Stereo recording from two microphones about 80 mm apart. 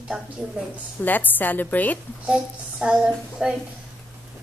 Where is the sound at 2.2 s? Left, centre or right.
Centre.